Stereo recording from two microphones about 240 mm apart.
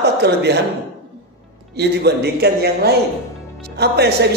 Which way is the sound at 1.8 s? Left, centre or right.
Right.